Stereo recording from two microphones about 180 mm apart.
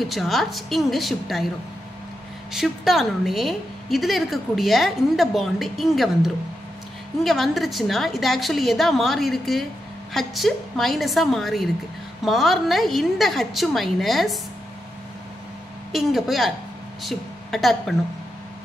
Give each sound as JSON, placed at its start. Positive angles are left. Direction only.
{"t": 0.0, "sound": "a woman's voice", "side_deg": 0}
{"t": 2.5, "sound": "a woman's voice", "side_deg": 0}
{"t": 15.9, "sound": "a woman's voice", "side_deg": 0}